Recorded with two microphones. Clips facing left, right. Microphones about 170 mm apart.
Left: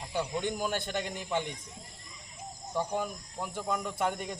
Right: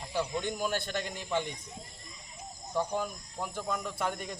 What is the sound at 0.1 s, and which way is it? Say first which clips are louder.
Speech: even; 15° left (ahead or behind).